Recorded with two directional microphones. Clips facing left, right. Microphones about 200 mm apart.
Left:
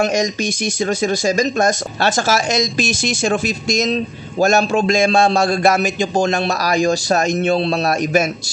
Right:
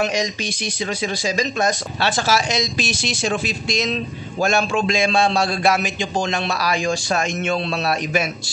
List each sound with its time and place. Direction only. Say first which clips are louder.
0.0 s speech: left 5 dB; 45° left (ahead or behind)